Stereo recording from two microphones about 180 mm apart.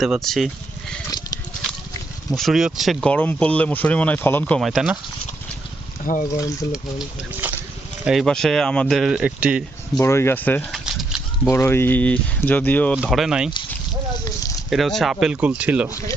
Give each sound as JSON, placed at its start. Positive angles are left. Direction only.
{"t": 0.0, "sound": "speech", "side_deg": 0}
{"t": 2.3, "sound": "speech", "side_deg": 0}
{"t": 6.2, "sound": "speech", "side_deg": 20}
{"t": 8.0, "sound": "speech", "side_deg": 0}
{"t": 10.0, "sound": "speech", "side_deg": 15}
{"t": 10.8, "sound": "a sound", "side_deg": -5}
{"t": 11.5, "sound": "speech", "side_deg": 10}
{"t": 13.0, "sound": "speech", "side_deg": 0}
{"t": 14.7, "sound": "speech", "side_deg": 0}
{"t": 15.9, "sound": "speech", "side_deg": 15}